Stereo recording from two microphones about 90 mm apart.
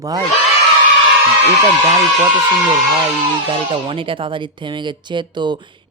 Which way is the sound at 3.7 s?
80° right.